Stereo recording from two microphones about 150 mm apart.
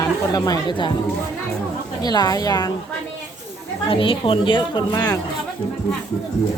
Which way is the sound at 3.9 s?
35° left (ahead or behind).